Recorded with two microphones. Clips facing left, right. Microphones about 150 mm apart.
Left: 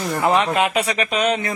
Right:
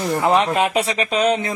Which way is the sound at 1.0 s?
30° right (ahead or behind).